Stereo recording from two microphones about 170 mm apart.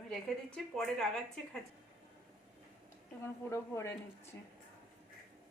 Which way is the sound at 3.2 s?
15° left (ahead or behind).